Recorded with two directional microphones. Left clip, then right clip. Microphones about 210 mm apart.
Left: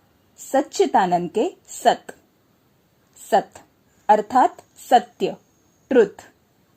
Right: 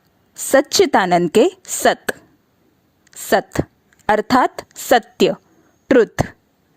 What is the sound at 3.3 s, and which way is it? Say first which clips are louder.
A woman's voice: right 3 dB; 45° right (ahead or behind).